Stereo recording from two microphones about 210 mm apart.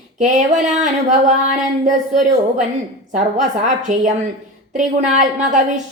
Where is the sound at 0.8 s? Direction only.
35° right (ahead or behind).